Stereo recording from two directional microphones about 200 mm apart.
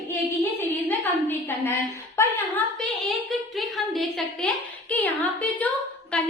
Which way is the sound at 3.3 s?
Centre (ahead or behind).